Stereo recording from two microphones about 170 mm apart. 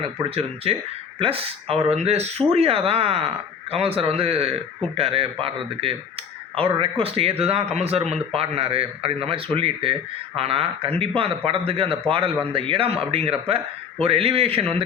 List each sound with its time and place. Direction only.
0.0 s speech: 35° right (ahead or behind)